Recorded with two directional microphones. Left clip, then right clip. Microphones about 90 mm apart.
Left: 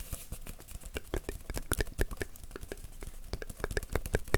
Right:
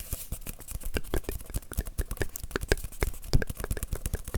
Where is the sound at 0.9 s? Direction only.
5° right (ahead or behind).